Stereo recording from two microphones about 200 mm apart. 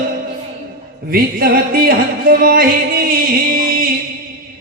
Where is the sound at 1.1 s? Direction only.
50° right (ahead or behind).